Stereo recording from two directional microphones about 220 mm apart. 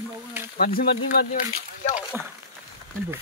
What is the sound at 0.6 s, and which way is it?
Speech, 40° left (ahead or behind).